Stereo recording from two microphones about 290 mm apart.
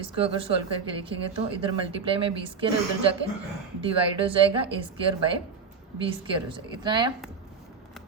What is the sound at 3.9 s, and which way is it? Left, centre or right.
A woman's voice, centre.